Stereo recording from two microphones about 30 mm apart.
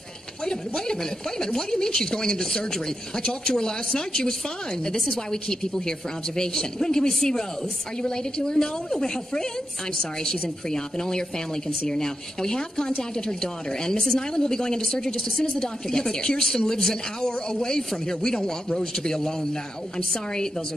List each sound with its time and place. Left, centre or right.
0.5 s a woman's voice: left
15.1 s speech: centre
15.6 s a woman's voice: left